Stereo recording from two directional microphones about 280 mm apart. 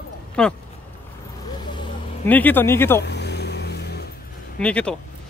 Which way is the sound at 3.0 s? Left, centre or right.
Left.